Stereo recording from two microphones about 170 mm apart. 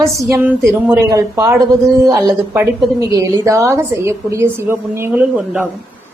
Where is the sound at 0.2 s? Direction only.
15° right (ahead or behind).